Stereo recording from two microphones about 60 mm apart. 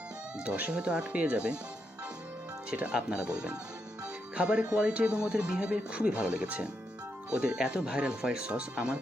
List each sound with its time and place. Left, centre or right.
0.3 s speech: right
2.9 s speech: centre